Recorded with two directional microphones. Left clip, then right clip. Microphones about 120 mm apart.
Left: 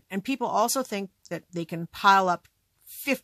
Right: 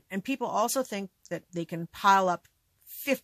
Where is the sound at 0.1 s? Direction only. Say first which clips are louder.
Left 3 dB; 25° left (ahead or behind).